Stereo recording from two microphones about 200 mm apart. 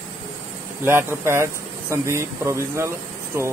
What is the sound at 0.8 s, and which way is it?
A man's voice, 10° right (ahead or behind).